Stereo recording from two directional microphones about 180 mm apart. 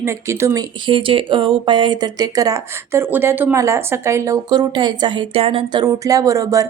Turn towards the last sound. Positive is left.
turn(degrees=-15)  # may be behind; listen again after turning